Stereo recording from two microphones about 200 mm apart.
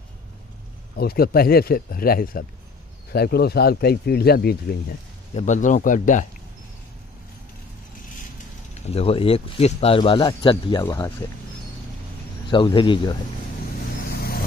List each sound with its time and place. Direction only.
0.9 s speech: 50° left (ahead or behind)
5.3 s speech: 35° left (ahead or behind)
8.8 s speech: 30° left (ahead or behind)
12.4 s speech: 25° left (ahead or behind)
14.0 s vehicle: 50° left (ahead or behind)